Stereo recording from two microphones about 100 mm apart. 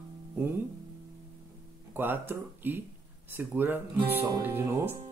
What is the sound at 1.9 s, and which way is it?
Speech, 20° right (ahead or behind).